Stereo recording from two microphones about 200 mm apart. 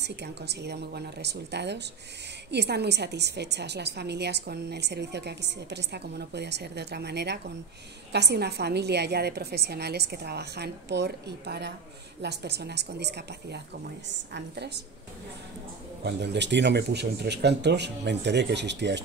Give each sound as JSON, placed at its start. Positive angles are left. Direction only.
{"t": 0.0, "sound": "a woman's voice", "side_deg": -55}
{"t": 16.0, "sound": "a woman's voice", "side_deg": -55}